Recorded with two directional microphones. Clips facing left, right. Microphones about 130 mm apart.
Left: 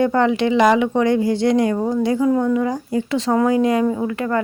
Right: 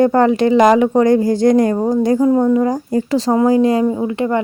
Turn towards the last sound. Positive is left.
turn(degrees=-25)  # may be behind; listen again after turning